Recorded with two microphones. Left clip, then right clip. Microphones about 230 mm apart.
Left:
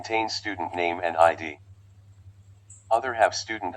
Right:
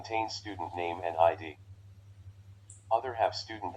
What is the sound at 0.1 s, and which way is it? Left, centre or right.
Speech, left.